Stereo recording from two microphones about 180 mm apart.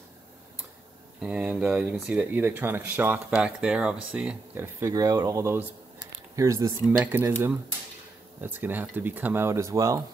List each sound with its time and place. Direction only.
1.2 s speech: 5° right (ahead or behind)